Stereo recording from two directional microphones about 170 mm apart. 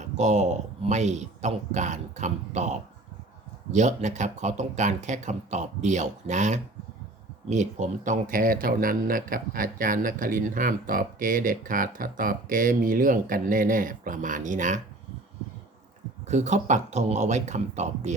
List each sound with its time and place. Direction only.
0.0 s speech: 45° right (ahead or behind)
16.2 s speech: 45° right (ahead or behind)